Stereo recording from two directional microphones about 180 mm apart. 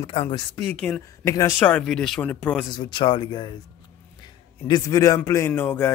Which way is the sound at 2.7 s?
25° left (ahead or behind).